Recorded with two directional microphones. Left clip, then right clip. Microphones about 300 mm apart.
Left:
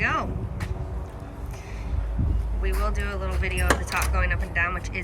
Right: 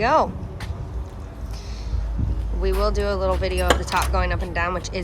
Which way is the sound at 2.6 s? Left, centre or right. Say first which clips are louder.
Right 8 dB; centre.